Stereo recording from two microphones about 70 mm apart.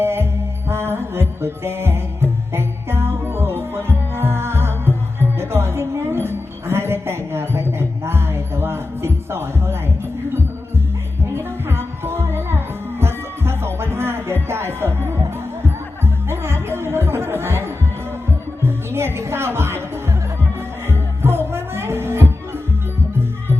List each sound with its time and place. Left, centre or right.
0.0 s music: right
5.4 s a sound: right
11.3 s music: right